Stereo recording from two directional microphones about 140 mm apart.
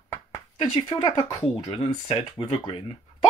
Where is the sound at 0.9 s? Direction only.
30° left (ahead or behind).